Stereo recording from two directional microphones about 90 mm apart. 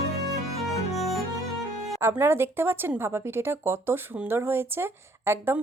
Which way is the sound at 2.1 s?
25° right (ahead or behind).